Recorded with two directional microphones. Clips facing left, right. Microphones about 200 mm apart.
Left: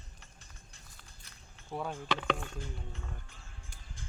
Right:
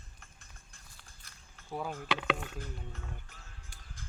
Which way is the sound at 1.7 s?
5° right (ahead or behind).